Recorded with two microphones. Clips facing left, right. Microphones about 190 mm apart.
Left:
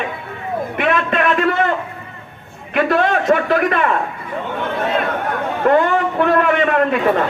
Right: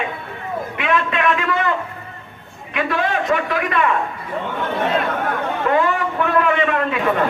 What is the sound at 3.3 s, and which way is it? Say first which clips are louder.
Speech: left 5 dB; 35° left (ahead or behind).